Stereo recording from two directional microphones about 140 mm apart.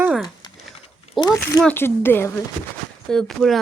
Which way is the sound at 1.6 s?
15° left (ahead or behind).